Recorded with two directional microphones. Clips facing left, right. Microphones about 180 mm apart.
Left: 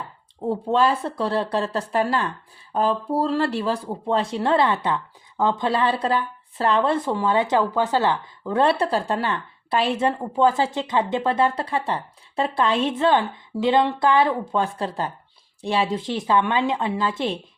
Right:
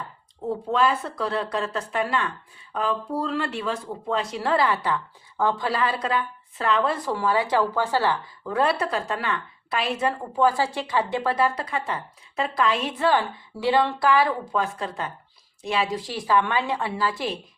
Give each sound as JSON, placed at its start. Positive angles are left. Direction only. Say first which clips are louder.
{"t": 0.5, "sound": "speech", "louder": "left 2 dB", "side_deg": 30}